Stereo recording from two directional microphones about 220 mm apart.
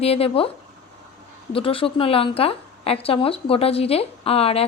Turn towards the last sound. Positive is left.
turn(degrees=25)  # may be behind; listen again after turning